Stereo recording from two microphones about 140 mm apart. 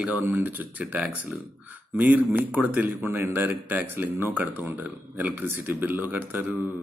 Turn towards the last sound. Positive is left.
turn(degrees=-10)  # may be behind; listen again after turning